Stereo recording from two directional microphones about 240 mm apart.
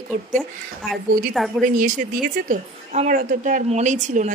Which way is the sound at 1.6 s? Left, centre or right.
Right.